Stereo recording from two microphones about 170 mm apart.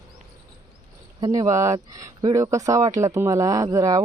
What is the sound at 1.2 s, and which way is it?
Speech, 20° right (ahead or behind).